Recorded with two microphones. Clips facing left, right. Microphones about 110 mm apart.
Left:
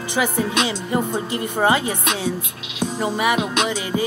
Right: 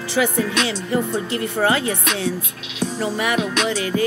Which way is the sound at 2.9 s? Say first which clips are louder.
Left 2 dB; 20° left (ahead or behind).